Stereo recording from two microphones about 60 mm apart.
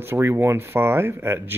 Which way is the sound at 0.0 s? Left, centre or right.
Right.